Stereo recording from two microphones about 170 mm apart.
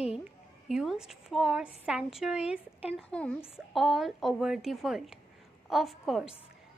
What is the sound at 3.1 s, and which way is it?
A woman's voice, 5° left (ahead or behind).